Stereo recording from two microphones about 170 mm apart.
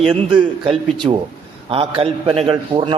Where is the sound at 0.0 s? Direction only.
30° right (ahead or behind).